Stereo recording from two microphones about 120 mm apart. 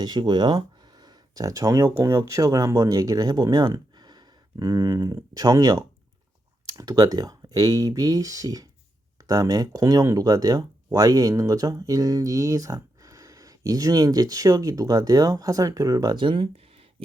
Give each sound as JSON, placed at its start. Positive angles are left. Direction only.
{"t": 0.0, "sound": "speech", "side_deg": -35}
{"t": 16.1, "sound": "speech", "side_deg": -45}